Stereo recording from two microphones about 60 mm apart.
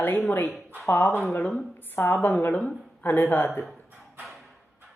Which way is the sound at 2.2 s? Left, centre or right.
Left.